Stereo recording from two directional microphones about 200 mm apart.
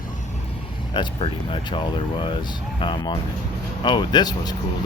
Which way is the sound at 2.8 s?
25° left (ahead or behind).